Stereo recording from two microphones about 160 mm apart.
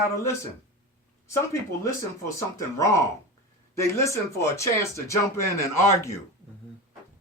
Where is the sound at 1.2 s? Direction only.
20° left (ahead or behind).